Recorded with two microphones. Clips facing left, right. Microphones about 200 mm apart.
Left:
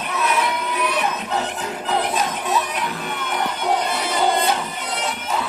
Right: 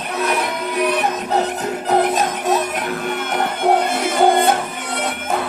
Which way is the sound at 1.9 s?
40° right (ahead or behind).